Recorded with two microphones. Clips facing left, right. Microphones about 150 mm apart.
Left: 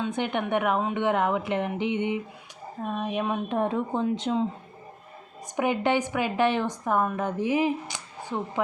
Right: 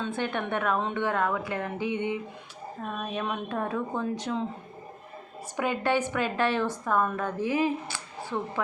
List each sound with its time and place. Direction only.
0.0 s a woman's voice: 20° left (ahead or behind)
5.5 s a woman's voice: 20° left (ahead or behind)